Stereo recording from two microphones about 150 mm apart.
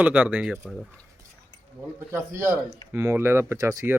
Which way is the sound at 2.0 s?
15° right (ahead or behind).